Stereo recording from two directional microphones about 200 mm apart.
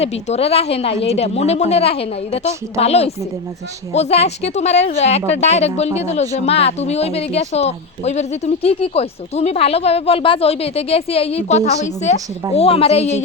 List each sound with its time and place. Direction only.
0.0 s a woman's voice: 30° left (ahead or behind)